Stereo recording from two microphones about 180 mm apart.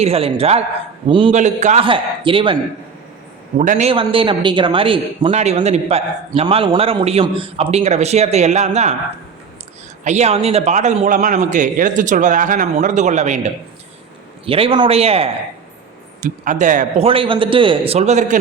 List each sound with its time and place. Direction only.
0.0 s a man's voice: 35° right (ahead or behind)
1.4 s a man's voice: 40° right (ahead or behind)
1.8 s a man's voice: 30° right (ahead or behind)
3.6 s a man's voice: 45° right (ahead or behind)
3.8 s a man's voice: 30° right (ahead or behind)
10.0 s a man's voice: 40° right (ahead or behind)
14.4 s a man's voice: 30° right (ahead or behind)
16.2 s a man's voice: 45° right (ahead or behind)
17.1 s a man's voice: 30° right (ahead or behind)